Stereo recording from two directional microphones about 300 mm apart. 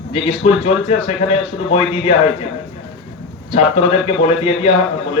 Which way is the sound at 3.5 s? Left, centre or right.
Centre.